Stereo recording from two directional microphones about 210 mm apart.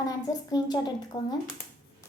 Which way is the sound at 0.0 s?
15° left (ahead or behind).